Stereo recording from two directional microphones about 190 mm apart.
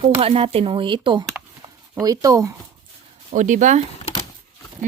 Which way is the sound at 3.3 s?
40° right (ahead or behind).